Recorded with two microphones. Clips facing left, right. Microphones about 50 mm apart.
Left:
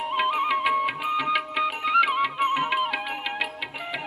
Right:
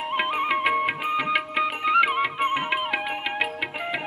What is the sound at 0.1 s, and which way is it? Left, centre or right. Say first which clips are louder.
Music: left 1 dB; right.